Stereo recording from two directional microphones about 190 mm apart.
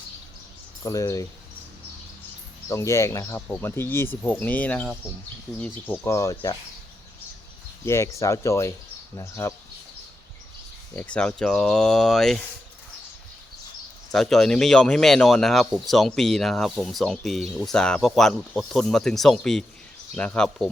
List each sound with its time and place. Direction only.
0.9 s speech: 15° left (ahead or behind)
2.6 s speech: 15° left (ahead or behind)
7.9 s speech: 15° left (ahead or behind)
10.9 s speech: 5° left (ahead or behind)
14.1 s speech: centre (ahead or behind)